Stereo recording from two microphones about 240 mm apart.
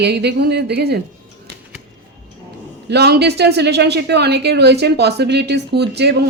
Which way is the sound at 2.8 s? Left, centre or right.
Right.